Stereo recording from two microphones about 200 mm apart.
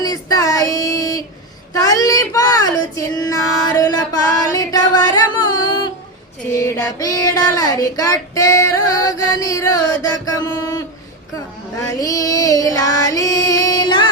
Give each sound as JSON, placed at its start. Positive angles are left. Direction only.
{"t": 0.0, "sound": "child singing", "side_deg": 20}
{"t": 1.7, "sound": "speech", "side_deg": 20}
{"t": 4.5, "sound": "music", "side_deg": 20}
{"t": 6.6, "sound": "child singing", "side_deg": 15}
{"t": 11.9, "sound": "female singing", "side_deg": 20}